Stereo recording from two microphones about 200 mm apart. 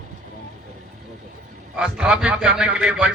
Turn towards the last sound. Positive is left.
turn(degrees=-5)  # may be behind; listen again after turning